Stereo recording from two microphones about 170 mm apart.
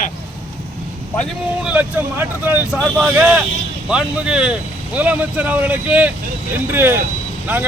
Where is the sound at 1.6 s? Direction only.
10° right (ahead or behind).